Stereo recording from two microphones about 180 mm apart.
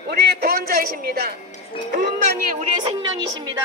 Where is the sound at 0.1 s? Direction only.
60° right (ahead or behind).